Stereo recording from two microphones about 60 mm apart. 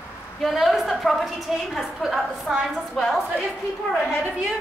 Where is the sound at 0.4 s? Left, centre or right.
Centre.